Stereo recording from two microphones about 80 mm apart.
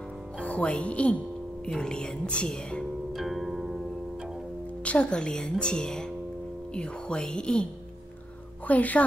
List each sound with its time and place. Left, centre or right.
0.4 s speech: centre
3.1 s music: centre
4.8 s speech: centre
8.6 s speech: centre